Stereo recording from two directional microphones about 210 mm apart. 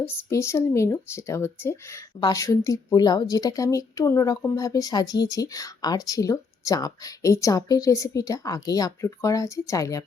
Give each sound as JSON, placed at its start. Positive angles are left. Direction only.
{"t": 0.3, "sound": "speech", "side_deg": 15}